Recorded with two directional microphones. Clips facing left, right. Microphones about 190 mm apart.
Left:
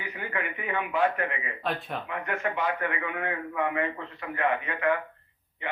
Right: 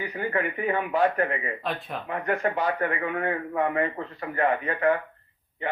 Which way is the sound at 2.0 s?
40° right (ahead or behind).